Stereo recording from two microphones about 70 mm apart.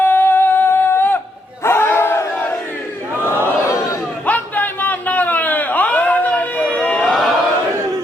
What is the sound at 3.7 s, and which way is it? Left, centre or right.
Crowd, left.